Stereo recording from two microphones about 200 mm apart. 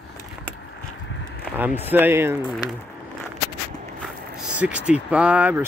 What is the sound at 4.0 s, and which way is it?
Speech, 5° right (ahead or behind).